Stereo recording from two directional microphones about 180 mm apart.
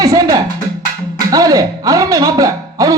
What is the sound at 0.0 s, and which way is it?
Music, 20° right (ahead or behind).